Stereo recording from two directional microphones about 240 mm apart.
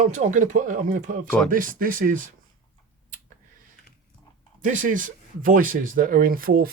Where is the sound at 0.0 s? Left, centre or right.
Right.